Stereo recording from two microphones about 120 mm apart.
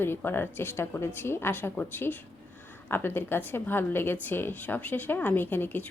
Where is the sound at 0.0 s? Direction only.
20° left (ahead or behind).